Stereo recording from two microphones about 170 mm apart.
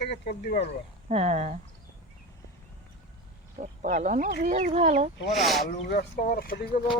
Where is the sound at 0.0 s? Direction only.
65° left (ahead or behind).